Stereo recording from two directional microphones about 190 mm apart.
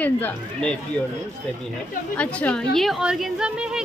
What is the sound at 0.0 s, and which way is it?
Speech, 10° left (ahead or behind).